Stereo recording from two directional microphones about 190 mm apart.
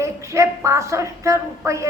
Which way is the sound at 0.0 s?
15° right (ahead or behind).